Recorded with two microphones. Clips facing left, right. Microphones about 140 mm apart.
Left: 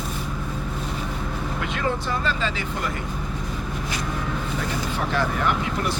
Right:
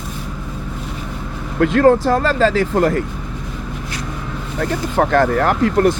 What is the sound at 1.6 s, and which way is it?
Speech, 75° right (ahead or behind).